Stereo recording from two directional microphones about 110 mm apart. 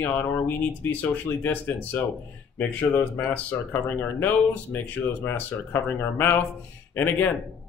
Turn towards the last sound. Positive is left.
turn(degrees=15)  # may be behind; listen again after turning